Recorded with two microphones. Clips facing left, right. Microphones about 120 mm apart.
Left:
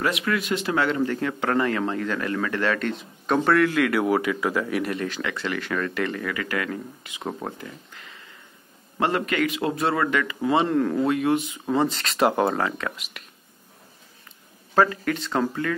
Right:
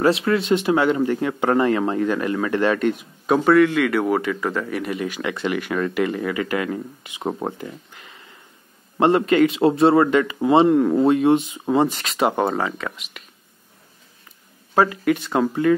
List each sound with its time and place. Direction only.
0.0 s a man's voice: 30° right (ahead or behind); by 5.0 s centre (ahead or behind)
5.0 s speech: 15° right (ahead or behind)
11.0 s speech: 25° right (ahead or behind)
12.1 s speech: centre (ahead or behind)
14.7 s a man's voice: 15° right (ahead or behind)